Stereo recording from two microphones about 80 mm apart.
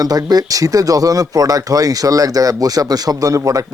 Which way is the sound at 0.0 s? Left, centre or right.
Right.